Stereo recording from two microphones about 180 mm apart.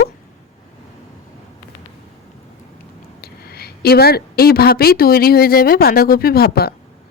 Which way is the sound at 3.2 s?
60° left (ahead or behind).